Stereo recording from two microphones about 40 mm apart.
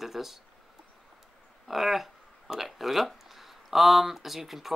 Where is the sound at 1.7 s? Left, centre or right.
Centre.